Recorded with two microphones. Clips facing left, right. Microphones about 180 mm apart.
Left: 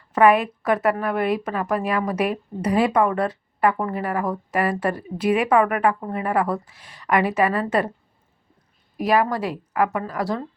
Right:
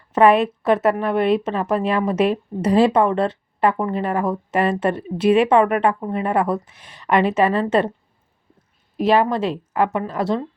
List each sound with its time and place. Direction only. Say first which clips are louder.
0.1 s a woman's voice: right 2 dB; 25° right (ahead or behind)
9.0 s a woman's voice: right 3 dB; 25° right (ahead or behind)